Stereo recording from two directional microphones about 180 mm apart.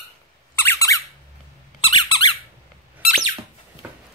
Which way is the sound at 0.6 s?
15° left (ahead or behind).